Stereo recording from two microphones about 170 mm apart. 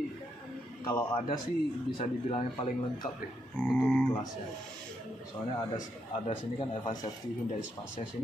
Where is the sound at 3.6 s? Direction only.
5° left (ahead or behind).